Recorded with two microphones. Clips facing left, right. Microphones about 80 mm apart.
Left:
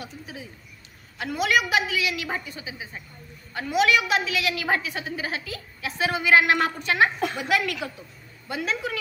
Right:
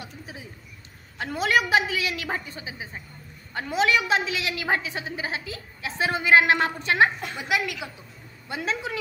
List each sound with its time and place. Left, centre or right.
1.1 s a woman's voice: right